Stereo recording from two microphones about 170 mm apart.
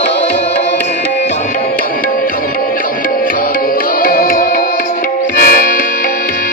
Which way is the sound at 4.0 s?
55° left (ahead or behind).